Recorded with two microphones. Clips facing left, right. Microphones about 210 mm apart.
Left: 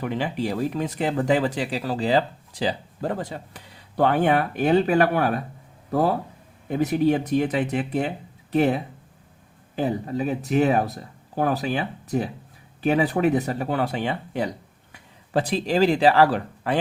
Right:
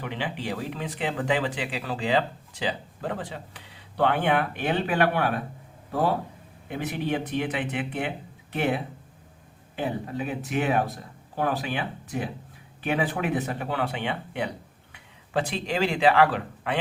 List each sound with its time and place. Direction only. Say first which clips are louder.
0.0 s speech: left 6 dB; 40° left (ahead or behind)
6.7 s speech: left 8 dB; 40° left (ahead or behind)